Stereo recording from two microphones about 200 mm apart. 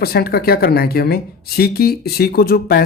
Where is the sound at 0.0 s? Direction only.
50° left (ahead or behind).